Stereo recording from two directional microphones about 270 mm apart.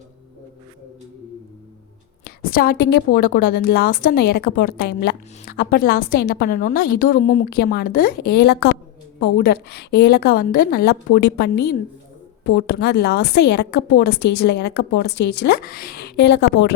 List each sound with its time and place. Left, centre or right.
2.2 s a sound: left
2.9 s a woman's voice: left
12.5 s a woman's voice: left